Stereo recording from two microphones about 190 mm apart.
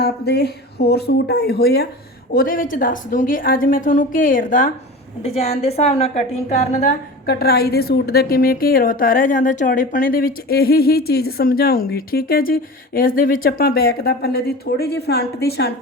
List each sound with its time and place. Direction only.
0.0 s a woman's voice: 60° left (ahead or behind)
5.2 s a woman's voice: 30° left (ahead or behind)
7.3 s a woman's voice: 55° left (ahead or behind)